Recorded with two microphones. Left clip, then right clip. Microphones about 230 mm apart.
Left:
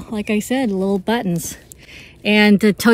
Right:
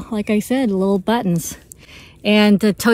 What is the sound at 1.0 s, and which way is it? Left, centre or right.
Mantra, right.